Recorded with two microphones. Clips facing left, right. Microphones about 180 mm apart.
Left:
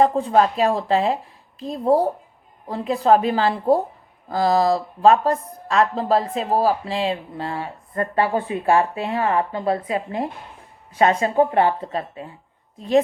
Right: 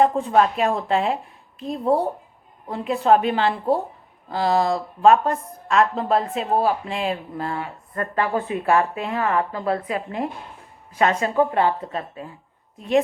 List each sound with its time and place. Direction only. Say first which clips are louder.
0.0 s speech: left 1 dB; 35° left (ahead or behind)